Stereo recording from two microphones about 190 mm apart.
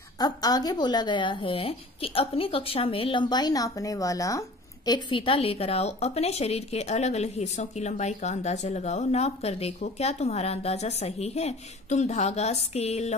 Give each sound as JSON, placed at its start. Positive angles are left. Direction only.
{"t": 0.2, "sound": "speech", "side_deg": 20}